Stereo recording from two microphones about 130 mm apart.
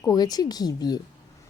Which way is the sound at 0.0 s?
30° left (ahead or behind).